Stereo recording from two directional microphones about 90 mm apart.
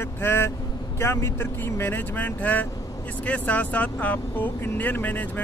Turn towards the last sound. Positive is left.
turn(degrees=20)  # may be behind; listen again after turning